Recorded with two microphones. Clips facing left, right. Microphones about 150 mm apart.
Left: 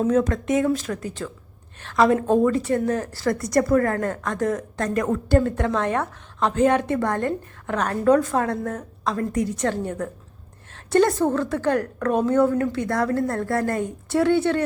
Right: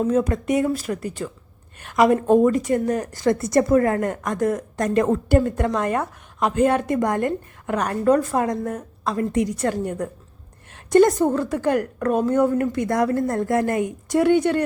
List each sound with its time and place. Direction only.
0.0 s a woman's voice: 10° right (ahead or behind)
4.9 s a woman's voice: 25° right (ahead or behind)
5.3 s a woman's voice: 10° right (ahead or behind)